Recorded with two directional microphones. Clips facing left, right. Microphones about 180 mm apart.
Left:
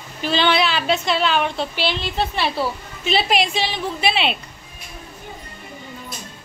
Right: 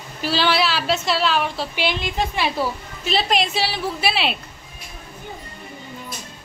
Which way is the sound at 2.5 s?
Centre (ahead or behind).